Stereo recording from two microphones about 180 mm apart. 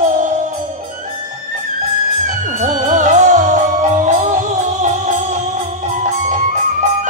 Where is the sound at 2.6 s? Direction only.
45° right (ahead or behind).